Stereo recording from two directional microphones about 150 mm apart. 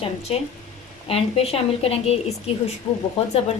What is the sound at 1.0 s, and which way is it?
Speech, 45° left (ahead or behind).